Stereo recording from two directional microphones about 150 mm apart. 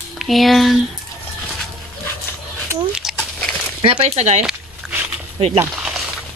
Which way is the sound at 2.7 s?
5° right (ahead or behind).